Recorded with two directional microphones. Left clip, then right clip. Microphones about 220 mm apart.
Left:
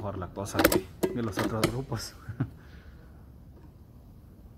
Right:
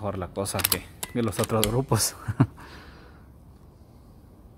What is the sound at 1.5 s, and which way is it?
Speech, 45° right (ahead or behind).